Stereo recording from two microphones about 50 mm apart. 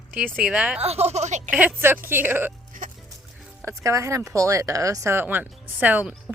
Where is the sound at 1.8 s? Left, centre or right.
Right.